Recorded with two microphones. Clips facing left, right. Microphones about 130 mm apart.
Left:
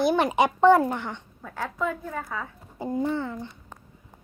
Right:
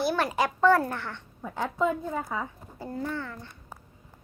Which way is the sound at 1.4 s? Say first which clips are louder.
Right 3 dB; 15° right (ahead or behind).